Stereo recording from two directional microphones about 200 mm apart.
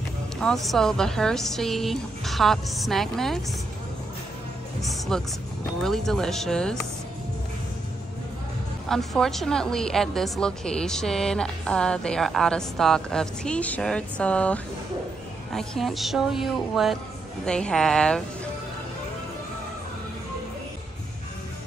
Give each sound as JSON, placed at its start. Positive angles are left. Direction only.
{"t": 0.4, "sound": "a woman's voice", "side_deg": 0}
{"t": 4.8, "sound": "a woman's voice", "side_deg": 0}
{"t": 8.8, "sound": "a woman's voice", "side_deg": 0}